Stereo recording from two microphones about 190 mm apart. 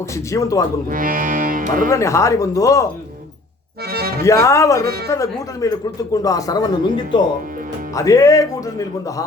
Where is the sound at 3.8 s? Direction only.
55° right (ahead or behind).